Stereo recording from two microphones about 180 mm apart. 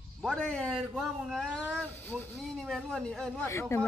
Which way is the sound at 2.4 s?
Centre (ahead or behind).